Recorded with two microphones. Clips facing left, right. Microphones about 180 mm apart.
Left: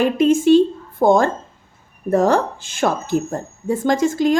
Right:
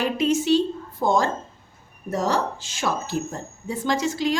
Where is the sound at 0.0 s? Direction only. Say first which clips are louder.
Left 7 dB; 50° left (ahead or behind).